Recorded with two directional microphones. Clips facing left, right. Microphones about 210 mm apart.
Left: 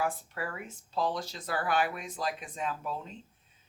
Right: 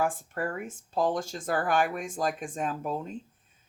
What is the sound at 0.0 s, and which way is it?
Speech, 50° right (ahead or behind).